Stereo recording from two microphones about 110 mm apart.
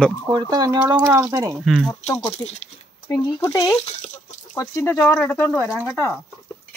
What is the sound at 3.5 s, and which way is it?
Speech, 35° left (ahead or behind).